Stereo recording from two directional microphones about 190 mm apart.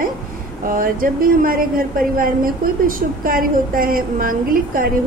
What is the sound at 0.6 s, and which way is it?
A woman's voice, 50° right (ahead or behind).